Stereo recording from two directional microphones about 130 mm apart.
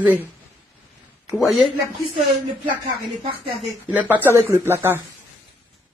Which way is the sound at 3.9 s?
15° right (ahead or behind).